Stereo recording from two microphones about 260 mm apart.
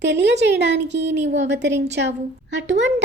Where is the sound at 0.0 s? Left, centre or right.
Right.